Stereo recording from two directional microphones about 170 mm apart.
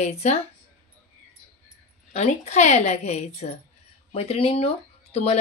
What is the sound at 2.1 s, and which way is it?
Speech, 40° left (ahead or behind).